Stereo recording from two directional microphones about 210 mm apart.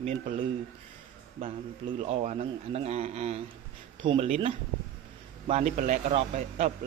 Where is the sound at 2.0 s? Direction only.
30° right (ahead or behind).